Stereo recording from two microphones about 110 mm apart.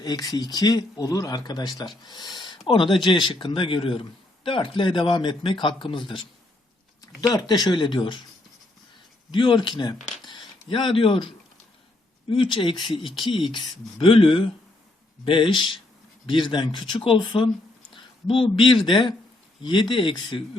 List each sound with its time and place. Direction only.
0.0 s speech: 35° left (ahead or behind)
7.0 s speech: 35° left (ahead or behind)
9.3 s speech: 45° left (ahead or behind)